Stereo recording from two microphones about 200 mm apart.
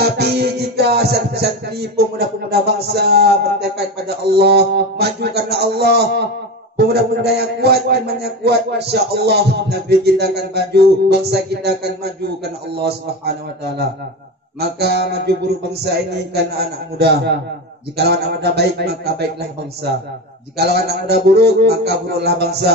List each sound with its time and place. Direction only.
0.0 s music: 55° right (ahead or behind)
6.8 s a man's voice: 55° right (ahead or behind)
14.6 s a man's voice: 55° right (ahead or behind)
20.5 s a man's voice: 55° right (ahead or behind)